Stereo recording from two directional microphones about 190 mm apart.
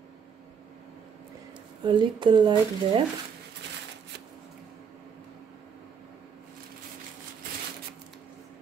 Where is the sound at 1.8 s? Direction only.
25° right (ahead or behind).